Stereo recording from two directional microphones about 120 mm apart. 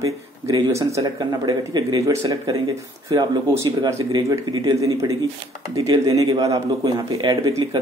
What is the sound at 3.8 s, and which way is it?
A man's voice, 35° right (ahead or behind).